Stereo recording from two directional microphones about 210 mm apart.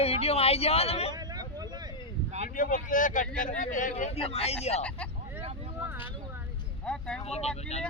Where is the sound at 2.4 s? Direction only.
40° left (ahead or behind).